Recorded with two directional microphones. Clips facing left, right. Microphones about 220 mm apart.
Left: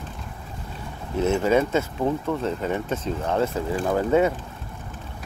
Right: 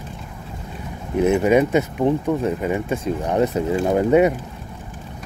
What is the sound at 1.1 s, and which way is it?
Speech, 15° right (ahead or behind).